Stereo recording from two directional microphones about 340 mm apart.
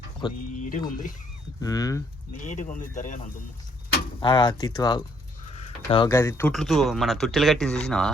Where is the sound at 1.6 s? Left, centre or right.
Centre.